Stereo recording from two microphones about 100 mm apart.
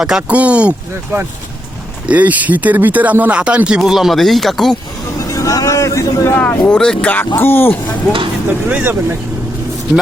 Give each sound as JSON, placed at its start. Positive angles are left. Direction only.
{"t": 0.0, "sound": "speech", "side_deg": -5}
{"t": 5.1, "sound": "speech", "side_deg": 30}
{"t": 6.4, "sound": "speech", "side_deg": 20}
{"t": 8.7, "sound": "speech", "side_deg": -25}